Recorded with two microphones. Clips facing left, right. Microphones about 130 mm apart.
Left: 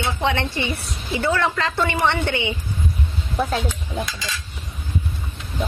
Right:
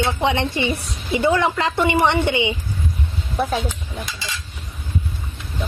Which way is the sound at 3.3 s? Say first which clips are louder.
Right 1 dB; 5° right (ahead or behind).